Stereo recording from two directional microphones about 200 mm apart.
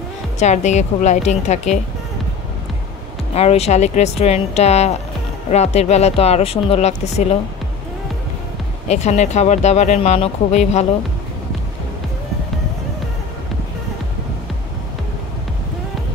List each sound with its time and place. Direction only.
0.4 s speech: 35° left (ahead or behind)
3.3 s speech: 30° left (ahead or behind)
8.8 s speech: 35° left (ahead or behind)